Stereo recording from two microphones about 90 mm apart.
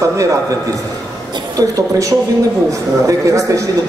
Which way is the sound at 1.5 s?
40° right (ahead or behind).